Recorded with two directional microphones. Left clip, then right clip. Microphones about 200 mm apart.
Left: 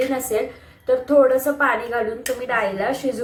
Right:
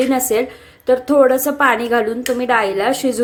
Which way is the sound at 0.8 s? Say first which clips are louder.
Right 3 dB; 50° right (ahead or behind).